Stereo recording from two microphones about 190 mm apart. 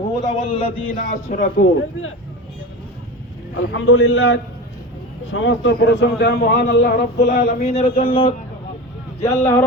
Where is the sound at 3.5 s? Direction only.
90° left; by 7.6 s 60° left (ahead or behind).